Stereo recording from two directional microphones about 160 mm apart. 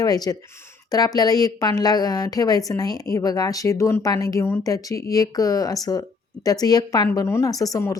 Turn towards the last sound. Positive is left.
turn(degrees=20)  # may be behind; listen again after turning